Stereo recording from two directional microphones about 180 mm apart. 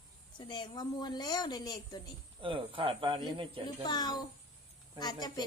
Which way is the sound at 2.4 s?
30° right (ahead or behind).